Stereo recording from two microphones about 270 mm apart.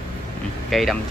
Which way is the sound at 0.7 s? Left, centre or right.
Centre.